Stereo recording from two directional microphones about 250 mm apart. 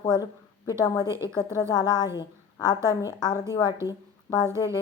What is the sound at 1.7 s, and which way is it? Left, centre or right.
A woman's voice, centre.